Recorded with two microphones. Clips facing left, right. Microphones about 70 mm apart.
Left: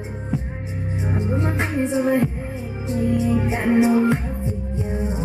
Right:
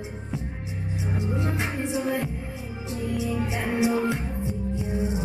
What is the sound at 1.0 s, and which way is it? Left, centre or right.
Music, left.